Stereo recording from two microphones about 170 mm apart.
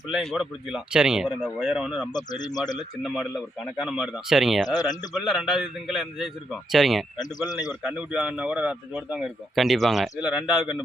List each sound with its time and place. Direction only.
0.1 s speech: centre (ahead or behind)
2.1 s speech: 25° left (ahead or behind)
3.0 s speech: centre (ahead or behind)
4.7 s speech: 25° left (ahead or behind)
5.1 s speech: centre (ahead or behind)
7.2 s speech: 20° left (ahead or behind)
7.7 s speech: 5° right (ahead or behind)